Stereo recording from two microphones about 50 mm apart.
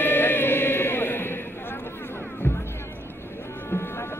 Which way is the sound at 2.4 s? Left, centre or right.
Left.